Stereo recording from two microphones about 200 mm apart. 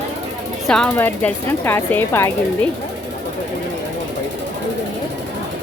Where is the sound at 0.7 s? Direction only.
5° left (ahead or behind).